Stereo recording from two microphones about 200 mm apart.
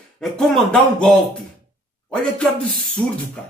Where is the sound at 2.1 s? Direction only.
5° left (ahead or behind).